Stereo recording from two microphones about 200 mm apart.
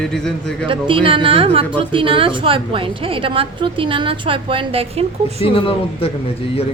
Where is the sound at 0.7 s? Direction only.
25° right (ahead or behind).